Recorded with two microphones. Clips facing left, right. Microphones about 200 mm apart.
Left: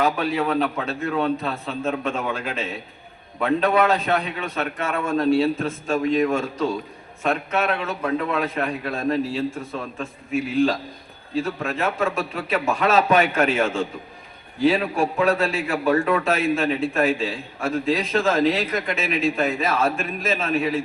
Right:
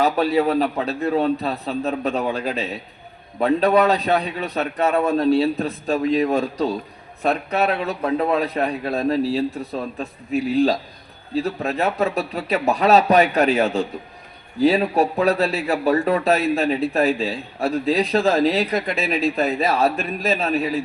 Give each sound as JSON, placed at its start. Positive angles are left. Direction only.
{"t": 0.0, "sound": "a man's voice", "side_deg": -35}